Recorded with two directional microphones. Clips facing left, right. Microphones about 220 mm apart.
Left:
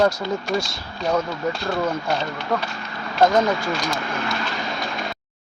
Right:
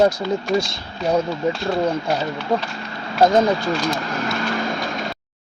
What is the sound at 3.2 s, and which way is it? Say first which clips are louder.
Speech: right 2 dB; 20° right (ahead or behind).